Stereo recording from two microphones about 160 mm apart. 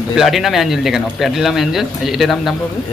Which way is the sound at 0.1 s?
Centre (ahead or behind).